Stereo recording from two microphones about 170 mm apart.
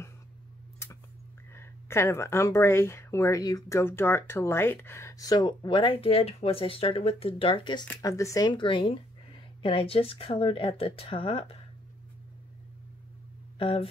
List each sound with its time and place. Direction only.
1.5 s speech: 15° left (ahead or behind); by 11.5 s 35° left (ahead or behind)
13.6 s speech: 30° left (ahead or behind)